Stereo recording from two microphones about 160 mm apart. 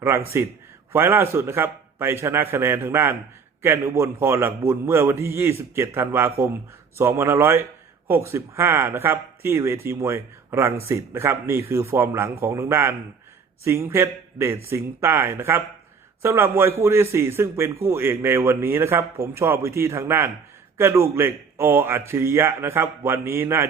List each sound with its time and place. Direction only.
0.0 s a man's voice: 15° right (ahead or behind)